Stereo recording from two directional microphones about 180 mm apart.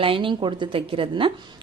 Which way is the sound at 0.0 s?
30° right (ahead or behind).